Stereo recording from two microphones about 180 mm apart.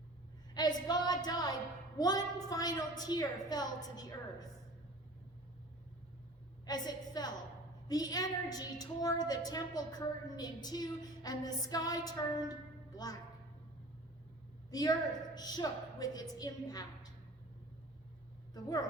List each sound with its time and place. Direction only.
0.5 s a woman's voice: 20° left (ahead or behind)
6.7 s a woman's voice: 20° left (ahead or behind)
14.7 s a woman's voice: 20° left (ahead or behind)
18.5 s a woman's voice: 20° left (ahead or behind)